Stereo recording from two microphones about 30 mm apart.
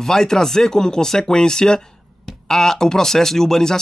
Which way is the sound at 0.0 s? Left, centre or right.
Centre.